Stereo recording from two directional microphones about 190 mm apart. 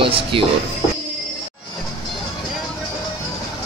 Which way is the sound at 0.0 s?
30° right (ahead or behind).